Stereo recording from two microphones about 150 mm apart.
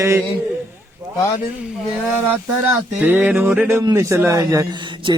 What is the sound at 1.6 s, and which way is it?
Speech, 10° right (ahead or behind).